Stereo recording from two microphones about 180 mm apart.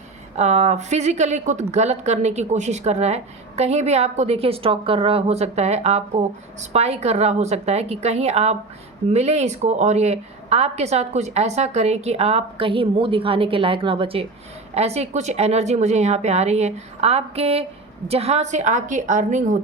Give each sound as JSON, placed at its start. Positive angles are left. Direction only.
{"t": 0.3, "sound": "a woman's voice", "side_deg": -40}